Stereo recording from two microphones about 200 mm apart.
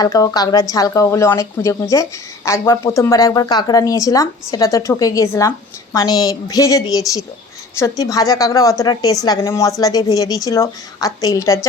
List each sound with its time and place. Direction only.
0.0 s speech: 15° left (ahead or behind)